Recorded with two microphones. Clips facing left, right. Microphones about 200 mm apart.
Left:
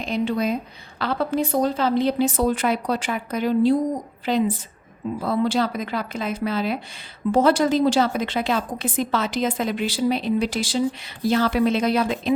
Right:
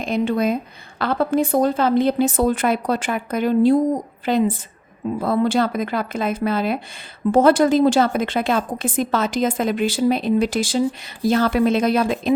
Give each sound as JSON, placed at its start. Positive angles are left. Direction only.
{"t": 0.0, "sound": "a woman's voice", "side_deg": -50}